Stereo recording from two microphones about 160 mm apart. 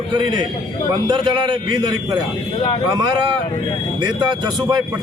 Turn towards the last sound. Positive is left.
turn(degrees=-25)  # may be behind; listen again after turning